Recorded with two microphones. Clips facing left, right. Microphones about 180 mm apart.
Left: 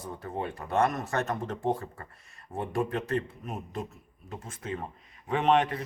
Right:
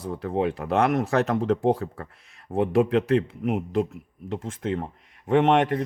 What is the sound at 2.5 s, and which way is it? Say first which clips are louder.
A man's voice: right 10 dB; 80° right.